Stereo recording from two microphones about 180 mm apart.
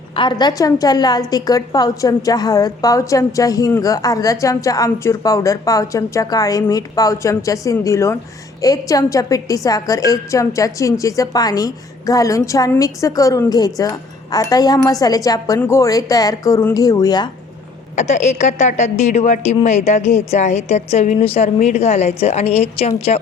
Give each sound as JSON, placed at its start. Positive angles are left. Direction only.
{"t": 0.2, "sound": "a woman's voice", "side_deg": 25}
{"t": 17.9, "sound": "a woman's voice", "side_deg": 40}